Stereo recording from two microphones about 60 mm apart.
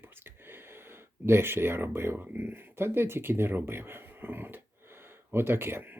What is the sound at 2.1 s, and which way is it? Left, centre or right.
Speech, right.